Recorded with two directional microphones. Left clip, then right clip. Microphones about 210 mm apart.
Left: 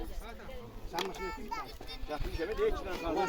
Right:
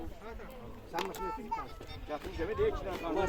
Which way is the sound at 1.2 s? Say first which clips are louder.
Right 2 dB; 55° left (ahead or behind).